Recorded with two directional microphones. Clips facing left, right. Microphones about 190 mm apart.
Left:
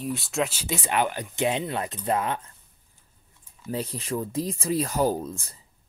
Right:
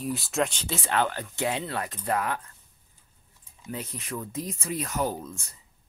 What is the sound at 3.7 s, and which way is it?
Speech, 30° left (ahead or behind).